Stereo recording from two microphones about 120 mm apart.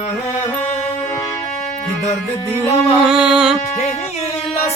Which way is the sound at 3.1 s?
5° right (ahead or behind).